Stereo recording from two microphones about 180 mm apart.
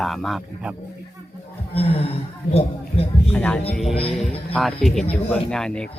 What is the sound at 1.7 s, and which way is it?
Speech, 35° left (ahead or behind).